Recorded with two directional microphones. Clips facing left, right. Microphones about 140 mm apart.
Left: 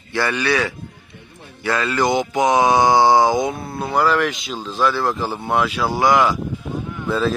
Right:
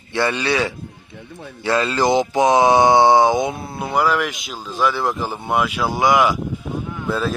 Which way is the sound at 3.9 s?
10° right (ahead or behind).